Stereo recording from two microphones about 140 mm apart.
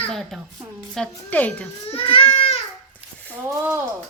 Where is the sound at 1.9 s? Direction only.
40° left (ahead or behind).